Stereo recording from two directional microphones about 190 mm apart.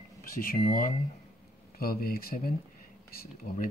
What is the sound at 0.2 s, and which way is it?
Speech, 45° left (ahead or behind).